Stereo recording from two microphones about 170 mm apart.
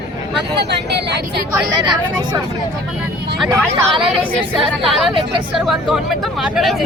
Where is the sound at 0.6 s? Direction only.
80° right.